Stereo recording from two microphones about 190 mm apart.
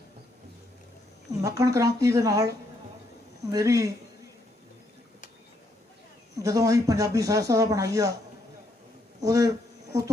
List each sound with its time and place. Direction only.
1.4 s speech: 15° right (ahead or behind)
6.3 s speech: 15° right (ahead or behind)
9.2 s speech: 20° right (ahead or behind)